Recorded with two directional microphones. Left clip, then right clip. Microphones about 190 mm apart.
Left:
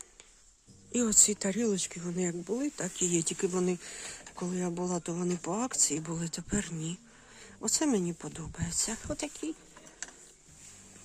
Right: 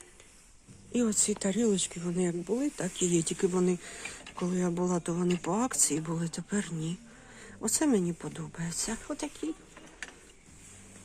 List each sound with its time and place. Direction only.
0.9 s speech: 25° left (ahead or behind)